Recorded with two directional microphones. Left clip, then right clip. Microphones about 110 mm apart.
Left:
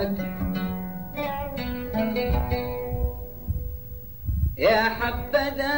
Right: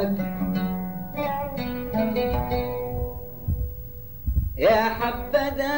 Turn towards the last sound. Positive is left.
turn(degrees=20)  # may be behind; listen again after turning